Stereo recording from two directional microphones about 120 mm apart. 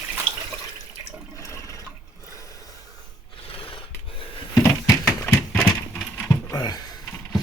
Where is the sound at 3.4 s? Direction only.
50° left (ahead or behind).